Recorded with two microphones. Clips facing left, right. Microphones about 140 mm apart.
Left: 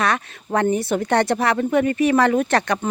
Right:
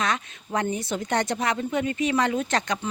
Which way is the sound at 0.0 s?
60° left (ahead or behind).